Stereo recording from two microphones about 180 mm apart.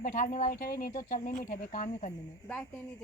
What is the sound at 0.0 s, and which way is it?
Speech, 45° left (ahead or behind).